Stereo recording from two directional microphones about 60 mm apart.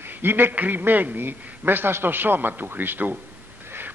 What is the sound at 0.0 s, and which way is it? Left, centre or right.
A man's voice, right.